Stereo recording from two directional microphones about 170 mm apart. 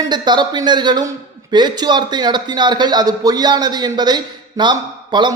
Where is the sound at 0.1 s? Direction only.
25° right (ahead or behind).